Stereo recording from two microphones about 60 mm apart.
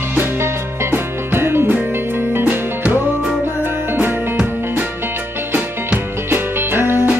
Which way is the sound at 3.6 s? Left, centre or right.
Right.